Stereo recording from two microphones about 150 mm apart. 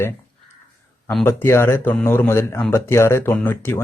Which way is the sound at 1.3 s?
15° left (ahead or behind).